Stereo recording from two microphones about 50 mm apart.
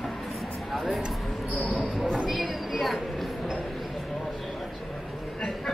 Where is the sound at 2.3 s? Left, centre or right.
Centre.